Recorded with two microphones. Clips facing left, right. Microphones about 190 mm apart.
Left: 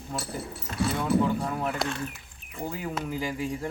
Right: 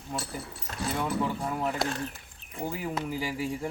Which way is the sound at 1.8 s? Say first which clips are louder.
Even; 35° right (ahead or behind).